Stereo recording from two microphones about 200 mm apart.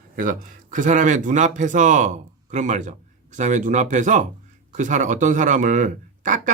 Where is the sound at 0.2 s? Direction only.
40° right (ahead or behind).